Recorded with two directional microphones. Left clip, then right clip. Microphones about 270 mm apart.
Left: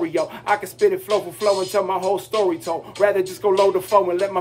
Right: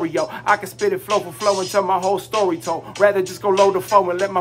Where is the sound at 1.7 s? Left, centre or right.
Centre.